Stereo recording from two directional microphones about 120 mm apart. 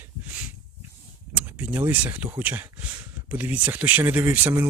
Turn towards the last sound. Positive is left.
turn(degrees=-15)  # may be behind; listen again after turning